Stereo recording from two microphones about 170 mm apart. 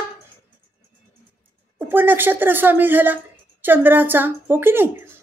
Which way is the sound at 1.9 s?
10° right (ahead or behind).